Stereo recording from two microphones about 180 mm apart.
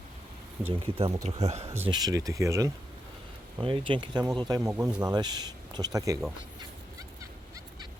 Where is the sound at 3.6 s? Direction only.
30° right (ahead or behind).